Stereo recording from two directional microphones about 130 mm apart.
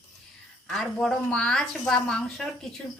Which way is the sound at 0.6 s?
Centre (ahead or behind).